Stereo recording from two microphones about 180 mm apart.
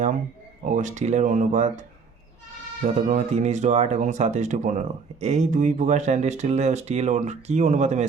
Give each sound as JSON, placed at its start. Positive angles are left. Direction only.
{"t": 0.6, "sound": "speech", "side_deg": -45}
{"t": 2.8, "sound": "speech", "side_deg": -40}